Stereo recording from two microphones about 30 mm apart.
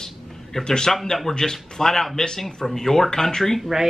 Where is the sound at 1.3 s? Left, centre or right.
Centre.